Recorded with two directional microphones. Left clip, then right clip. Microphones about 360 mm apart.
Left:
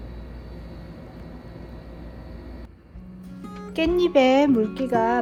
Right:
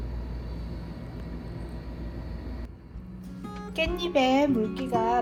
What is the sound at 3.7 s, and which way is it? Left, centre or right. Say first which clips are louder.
Music: left 7 dB; left.